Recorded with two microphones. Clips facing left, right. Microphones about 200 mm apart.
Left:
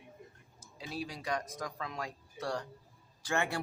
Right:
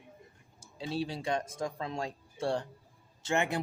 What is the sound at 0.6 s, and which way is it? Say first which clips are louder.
Speech: right 6 dB; 30° right (ahead or behind).